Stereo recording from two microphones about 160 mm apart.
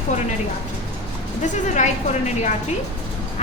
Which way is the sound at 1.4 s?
50° left (ahead or behind).